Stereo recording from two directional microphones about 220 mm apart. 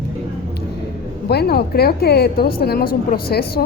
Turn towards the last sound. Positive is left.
turn(degrees=45)  # may be behind; listen again after turning